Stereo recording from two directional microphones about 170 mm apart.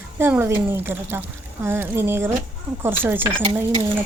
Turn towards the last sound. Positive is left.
turn(degrees=-30)  # may be behind; listen again after turning